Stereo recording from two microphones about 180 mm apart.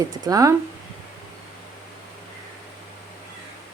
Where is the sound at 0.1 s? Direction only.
20° right (ahead or behind).